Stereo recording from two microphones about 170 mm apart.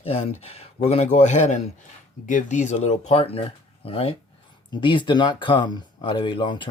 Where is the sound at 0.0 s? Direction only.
35° left (ahead or behind).